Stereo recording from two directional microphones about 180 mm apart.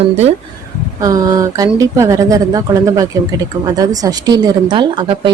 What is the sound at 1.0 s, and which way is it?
A woman's voice, 20° right (ahead or behind).